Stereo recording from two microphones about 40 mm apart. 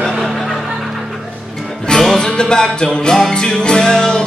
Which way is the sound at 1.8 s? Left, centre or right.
Centre.